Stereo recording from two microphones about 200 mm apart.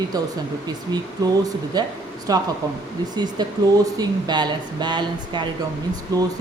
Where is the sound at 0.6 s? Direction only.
20° right (ahead or behind).